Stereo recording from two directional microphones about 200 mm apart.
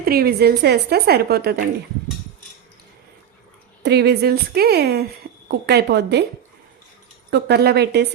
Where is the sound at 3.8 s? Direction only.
55° right (ahead or behind).